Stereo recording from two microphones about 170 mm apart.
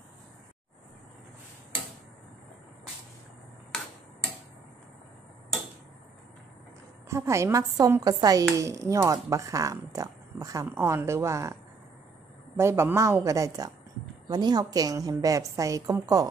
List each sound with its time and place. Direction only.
7.1 s speech: 15° right (ahead or behind)
12.5 s a woman's voice: 15° right (ahead or behind)